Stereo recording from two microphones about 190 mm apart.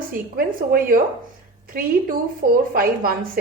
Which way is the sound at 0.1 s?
50° right (ahead or behind).